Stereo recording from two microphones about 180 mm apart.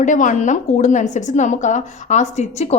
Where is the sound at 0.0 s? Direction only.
45° left (ahead or behind).